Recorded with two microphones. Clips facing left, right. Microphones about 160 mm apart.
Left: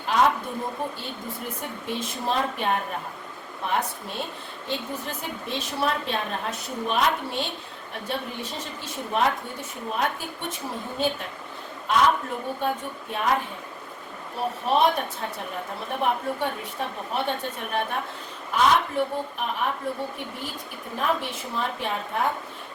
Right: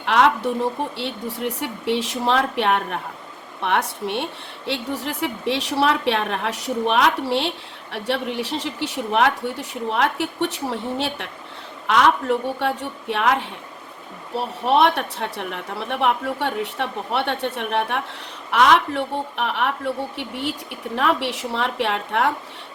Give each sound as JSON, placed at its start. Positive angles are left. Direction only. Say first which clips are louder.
{"t": 0.0, "sound": "a woman's voice", "louder": "right 4 dB", "side_deg": -80}